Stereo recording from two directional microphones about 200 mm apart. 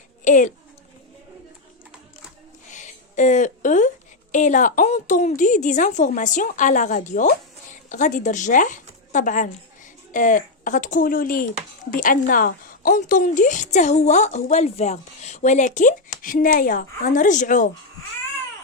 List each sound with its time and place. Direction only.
0.3 s a woman's voice: 40° left (ahead or behind)
2.7 s a woman's voice: 40° left (ahead or behind)